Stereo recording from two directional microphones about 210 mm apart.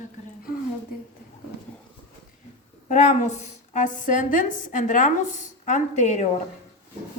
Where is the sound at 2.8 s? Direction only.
35° left (ahead or behind).